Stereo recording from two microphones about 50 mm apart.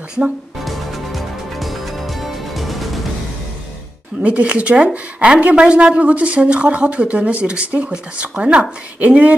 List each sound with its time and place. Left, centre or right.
0.7 s music: centre
4.2 s a woman's voice: right